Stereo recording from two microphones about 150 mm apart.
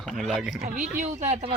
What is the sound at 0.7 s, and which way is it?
Speech, 55° right (ahead or behind).